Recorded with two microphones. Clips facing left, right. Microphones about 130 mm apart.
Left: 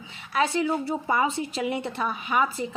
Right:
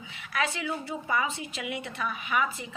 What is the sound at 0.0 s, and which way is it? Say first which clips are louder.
A woman's voice: left 5 dB; 30° left (ahead or behind).